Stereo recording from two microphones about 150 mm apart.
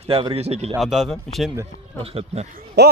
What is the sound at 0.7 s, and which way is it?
Speech, centre (ahead or behind).